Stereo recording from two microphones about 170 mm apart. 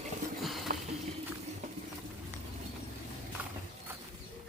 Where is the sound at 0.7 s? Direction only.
50° right (ahead or behind).